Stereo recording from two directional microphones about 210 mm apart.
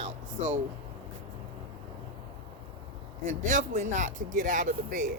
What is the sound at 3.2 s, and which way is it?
Speech, 35° right (ahead or behind).